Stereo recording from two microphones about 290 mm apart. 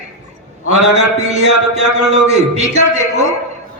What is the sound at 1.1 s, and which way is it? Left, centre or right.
A man's voice, right.